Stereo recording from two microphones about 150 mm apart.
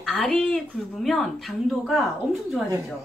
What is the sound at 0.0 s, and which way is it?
A woman's voice, 5° left (ahead or behind).